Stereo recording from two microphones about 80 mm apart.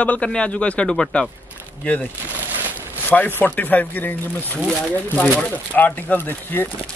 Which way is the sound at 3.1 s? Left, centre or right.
Left.